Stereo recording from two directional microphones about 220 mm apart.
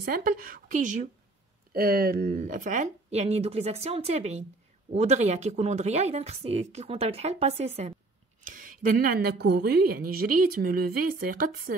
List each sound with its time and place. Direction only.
0.0 s a woman's voice: 40° right (ahead or behind)